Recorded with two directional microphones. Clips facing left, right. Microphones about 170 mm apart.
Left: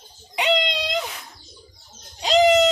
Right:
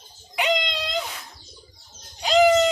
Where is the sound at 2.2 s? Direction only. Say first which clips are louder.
Left 1 dB; 20° left (ahead or behind).